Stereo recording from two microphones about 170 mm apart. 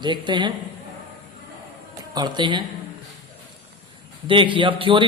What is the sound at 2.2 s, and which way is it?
Speech, 25° right (ahead or behind).